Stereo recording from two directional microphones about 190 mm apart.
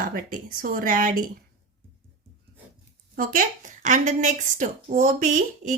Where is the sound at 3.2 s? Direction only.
45° right (ahead or behind).